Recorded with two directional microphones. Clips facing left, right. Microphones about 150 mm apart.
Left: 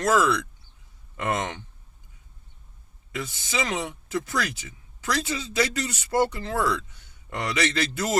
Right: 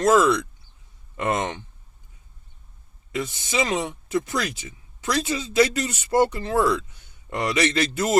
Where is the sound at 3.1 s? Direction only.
20° right (ahead or behind).